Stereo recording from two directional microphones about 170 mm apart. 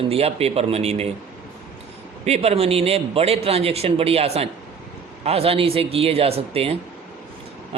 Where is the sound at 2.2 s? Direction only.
40° right (ahead or behind).